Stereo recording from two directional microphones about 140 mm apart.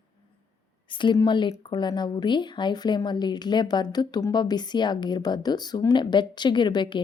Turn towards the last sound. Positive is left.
turn(degrees=35)  # may be behind; listen again after turning